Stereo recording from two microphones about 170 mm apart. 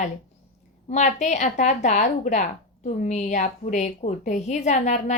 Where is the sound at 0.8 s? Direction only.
45° left (ahead or behind).